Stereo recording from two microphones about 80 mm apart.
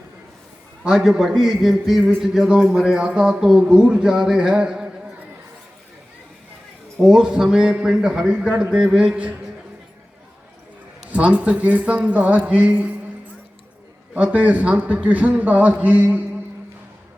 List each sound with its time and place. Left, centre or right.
0.9 s a man's voice: centre
7.0 s speech: centre
11.1 s speech: centre
14.1 s a man's voice: centre